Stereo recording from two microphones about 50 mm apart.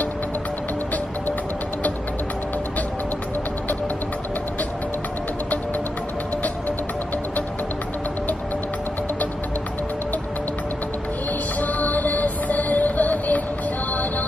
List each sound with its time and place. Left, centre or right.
11.6 s music: left